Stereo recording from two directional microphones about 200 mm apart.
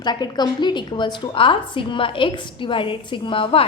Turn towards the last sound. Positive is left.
turn(degrees=25)  # may be behind; listen again after turning